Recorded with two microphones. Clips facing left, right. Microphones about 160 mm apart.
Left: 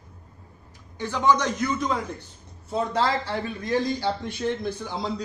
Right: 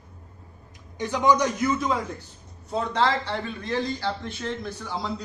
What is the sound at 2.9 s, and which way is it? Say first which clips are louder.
Speech: right 2 dB; 5° left (ahead or behind).